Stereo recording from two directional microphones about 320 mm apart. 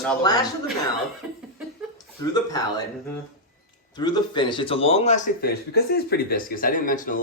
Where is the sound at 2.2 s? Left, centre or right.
Centre.